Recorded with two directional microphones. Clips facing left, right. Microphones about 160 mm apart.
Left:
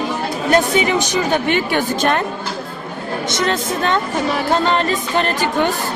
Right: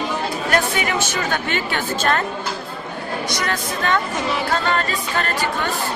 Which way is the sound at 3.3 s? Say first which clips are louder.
Left 8 dB; 25° left (ahead or behind).